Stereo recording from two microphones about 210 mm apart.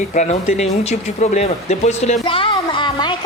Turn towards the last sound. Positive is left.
turn(degrees=20)  # may be behind; listen again after turning